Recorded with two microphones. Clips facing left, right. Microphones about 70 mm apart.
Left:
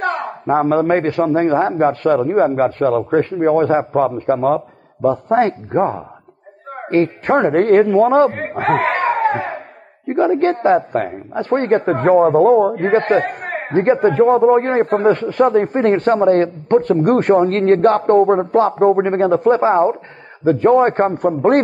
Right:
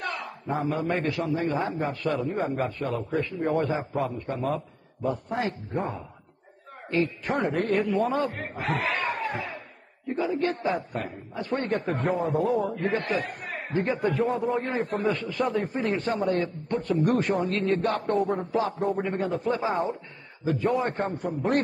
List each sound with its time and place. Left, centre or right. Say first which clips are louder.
0.0 s a man's voice: left 13 dB; left